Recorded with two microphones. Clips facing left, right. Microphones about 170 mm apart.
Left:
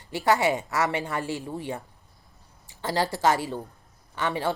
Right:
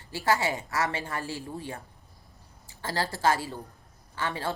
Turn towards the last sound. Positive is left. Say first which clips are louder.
# left 5 dB
turn(degrees=15)  # may be behind; listen again after turning